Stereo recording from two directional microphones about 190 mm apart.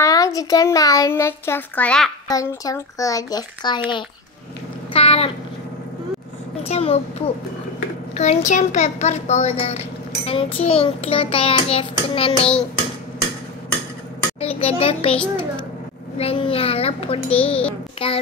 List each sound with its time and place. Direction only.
0.0 s a child's voice: 15° left (ahead or behind)
2.2 s clapping: 20° left (ahead or behind)
4.9 s a sound: 30° left (ahead or behind)
6.6 s a child's voice: 30° left (ahead or behind)
10.2 s clapping: 30° left (ahead or behind)
14.6 s a child's voice: 30° left (ahead or behind)
16.2 s a child's voice: 30° left (ahead or behind)
17.9 s clapping: 30° left (ahead or behind)